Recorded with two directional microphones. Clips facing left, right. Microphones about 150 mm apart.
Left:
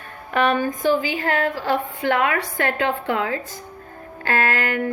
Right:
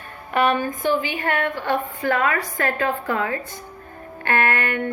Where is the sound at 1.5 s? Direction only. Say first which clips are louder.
Left 1 dB; 90° left.